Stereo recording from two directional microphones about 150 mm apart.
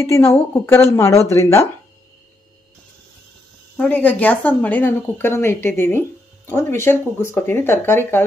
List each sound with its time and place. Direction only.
0.0 s speech: 15° left (ahead or behind)
3.7 s speech: 10° left (ahead or behind)